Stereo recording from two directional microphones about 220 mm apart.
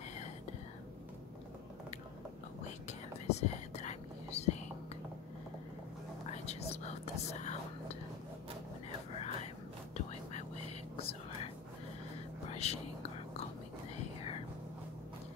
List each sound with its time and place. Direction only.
2.9 s whispering: 30° left (ahead or behind)
6.3 s whispering: 30° left (ahead or behind)
9.1 s a sound: 30° left (ahead or behind)
11.0 s whispering: 25° left (ahead or behind)